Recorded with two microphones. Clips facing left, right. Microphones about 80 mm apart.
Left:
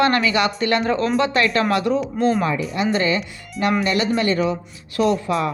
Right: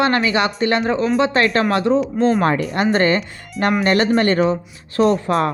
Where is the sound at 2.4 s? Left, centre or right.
Right.